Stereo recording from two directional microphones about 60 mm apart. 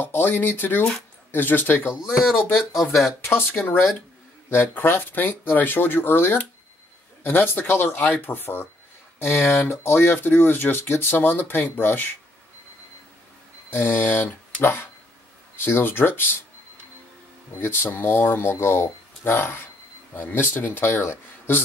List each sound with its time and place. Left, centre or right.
0.0 s speech: left
2.0 s speech: centre
2.3 s speech: left
2.7 s speech: centre
3.3 s speech: left
13.7 s speech: left
17.6 s speech: left